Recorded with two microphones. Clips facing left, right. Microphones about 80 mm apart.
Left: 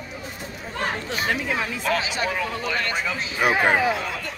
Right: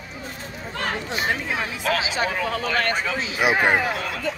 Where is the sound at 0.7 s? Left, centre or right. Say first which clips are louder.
Even; centre.